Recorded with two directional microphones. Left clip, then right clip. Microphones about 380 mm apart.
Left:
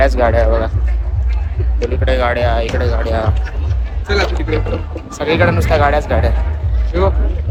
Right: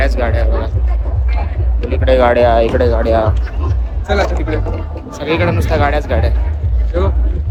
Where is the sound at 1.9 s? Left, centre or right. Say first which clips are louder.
Right 6 dB; centre.